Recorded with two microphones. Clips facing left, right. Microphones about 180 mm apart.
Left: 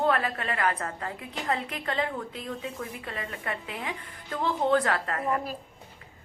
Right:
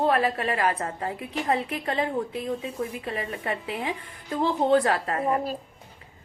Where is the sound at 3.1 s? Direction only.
20° right (ahead or behind).